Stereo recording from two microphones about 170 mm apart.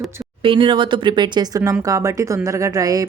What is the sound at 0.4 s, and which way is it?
Speech, 30° right (ahead or behind).